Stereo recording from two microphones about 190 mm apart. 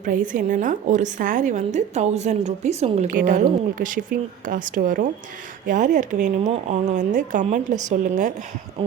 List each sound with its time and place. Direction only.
0.0 s a woman's voice: 45° right (ahead or behind)
3.1 s a woman's voice: 45° right (ahead or behind)